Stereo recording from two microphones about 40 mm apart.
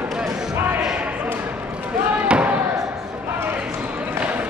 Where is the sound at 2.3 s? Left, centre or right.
Right.